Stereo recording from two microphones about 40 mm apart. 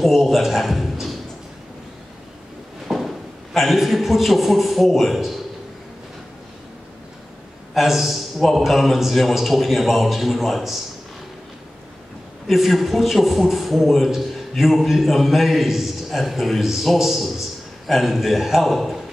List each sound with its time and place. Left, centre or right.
0.1 s a man's voice: centre
2.9 s a sound: centre
3.5 s a man's voice: centre
7.7 s a man's voice: centre
12.4 s a man's voice: centre